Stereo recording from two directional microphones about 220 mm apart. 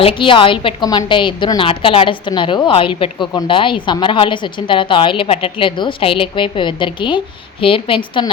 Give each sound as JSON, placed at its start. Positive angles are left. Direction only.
{"t": 0.0, "sound": "a woman's voice", "side_deg": 25}